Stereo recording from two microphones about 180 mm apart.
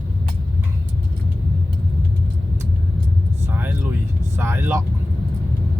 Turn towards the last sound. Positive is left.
turn(degrees=-15)  # may be behind; listen again after turning